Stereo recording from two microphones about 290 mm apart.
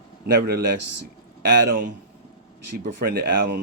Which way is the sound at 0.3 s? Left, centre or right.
Right.